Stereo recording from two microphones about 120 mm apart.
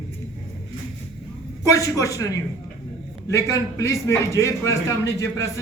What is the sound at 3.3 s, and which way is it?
A man's voice, 25° left (ahead or behind).